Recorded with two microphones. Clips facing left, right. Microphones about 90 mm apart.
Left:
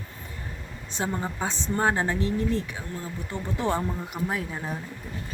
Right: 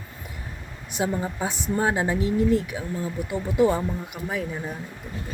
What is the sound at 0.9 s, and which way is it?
Speech, 15° right (ahead or behind).